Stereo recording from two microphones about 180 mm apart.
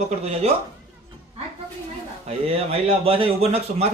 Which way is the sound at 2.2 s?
35° right (ahead or behind).